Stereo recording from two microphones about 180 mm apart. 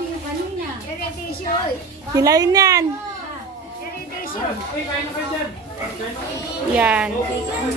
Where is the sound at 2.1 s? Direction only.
20° right (ahead or behind).